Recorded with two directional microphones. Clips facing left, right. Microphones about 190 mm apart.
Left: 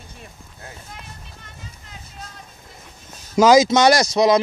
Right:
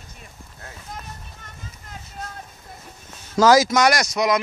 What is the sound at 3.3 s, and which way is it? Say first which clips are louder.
Speech: left 2 dB; 15° left (ahead or behind).